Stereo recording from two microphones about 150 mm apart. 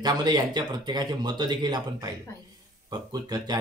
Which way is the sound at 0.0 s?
30° right (ahead or behind).